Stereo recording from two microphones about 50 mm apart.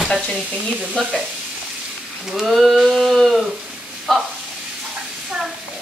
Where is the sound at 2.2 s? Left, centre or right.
Centre.